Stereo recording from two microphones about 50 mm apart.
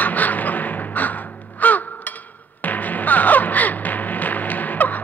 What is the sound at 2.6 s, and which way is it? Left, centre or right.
Music, left.